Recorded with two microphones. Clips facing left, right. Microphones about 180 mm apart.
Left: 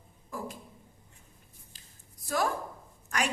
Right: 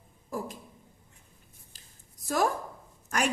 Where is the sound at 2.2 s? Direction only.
45° right (ahead or behind).